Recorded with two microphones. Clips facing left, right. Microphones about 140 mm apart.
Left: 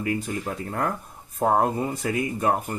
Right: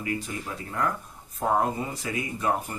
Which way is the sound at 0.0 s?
50° left (ahead or behind).